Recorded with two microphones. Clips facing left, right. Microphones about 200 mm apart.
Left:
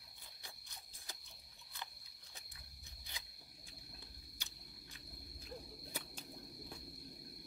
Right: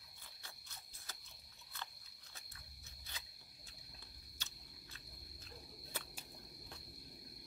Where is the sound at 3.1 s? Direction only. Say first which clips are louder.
Even; 15° left (ahead or behind).